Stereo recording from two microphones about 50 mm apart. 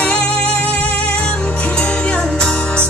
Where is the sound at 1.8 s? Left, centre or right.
Centre.